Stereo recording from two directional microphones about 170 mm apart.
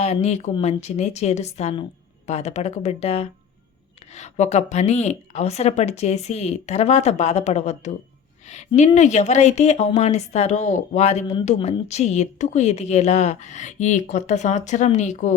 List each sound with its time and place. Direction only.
0.0 s a woman's voice: 40° left (ahead or behind)